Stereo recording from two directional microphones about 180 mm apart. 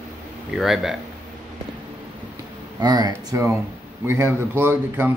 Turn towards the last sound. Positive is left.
turn(degrees=-10)  # may be behind; listen again after turning